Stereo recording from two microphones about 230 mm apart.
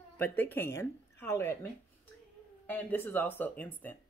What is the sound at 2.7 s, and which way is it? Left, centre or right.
Speech, centre.